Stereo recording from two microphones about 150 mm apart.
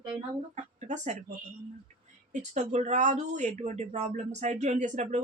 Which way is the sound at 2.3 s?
50° right (ahead or behind).